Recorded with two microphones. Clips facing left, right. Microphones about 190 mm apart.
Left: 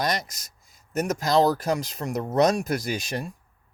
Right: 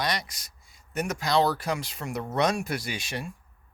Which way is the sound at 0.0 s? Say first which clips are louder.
Left 3 dB; 45° left (ahead or behind).